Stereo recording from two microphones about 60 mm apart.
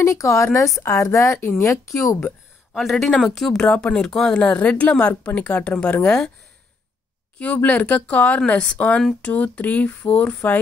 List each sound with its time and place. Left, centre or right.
0.0 s a woman's voice: left
2.7 s speech: centre
3.4 s a woman's voice: centre; by 6.0 s left
6.0 s speech: centre
7.3 s a woman's voice: left